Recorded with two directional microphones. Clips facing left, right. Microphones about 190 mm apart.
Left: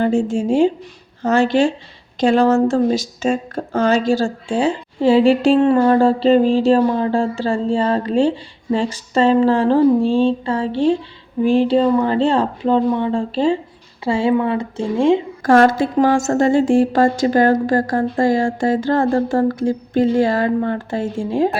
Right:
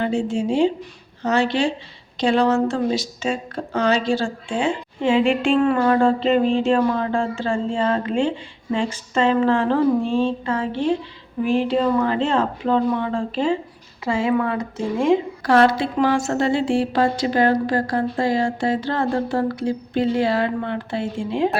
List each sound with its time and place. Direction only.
0.0 s a woman's voice: 45° left (ahead or behind); by 15.2 s 30° left (ahead or behind)
15.4 s a woman's voice: 45° left (ahead or behind)